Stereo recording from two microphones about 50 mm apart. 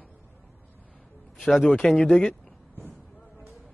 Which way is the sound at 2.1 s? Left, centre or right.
Centre.